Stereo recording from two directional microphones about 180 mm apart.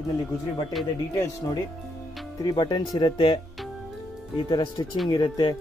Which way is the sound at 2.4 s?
25° left (ahead or behind).